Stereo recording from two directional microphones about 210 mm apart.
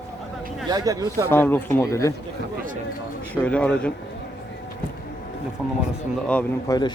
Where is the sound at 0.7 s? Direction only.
20° right (ahead or behind).